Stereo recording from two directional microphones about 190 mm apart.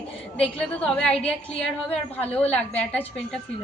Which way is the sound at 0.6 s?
5° left (ahead or behind).